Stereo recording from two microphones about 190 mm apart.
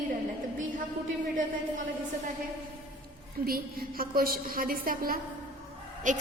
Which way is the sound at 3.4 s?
50° right (ahead or behind).